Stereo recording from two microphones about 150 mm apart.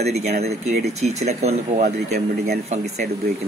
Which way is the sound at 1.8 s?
90° right.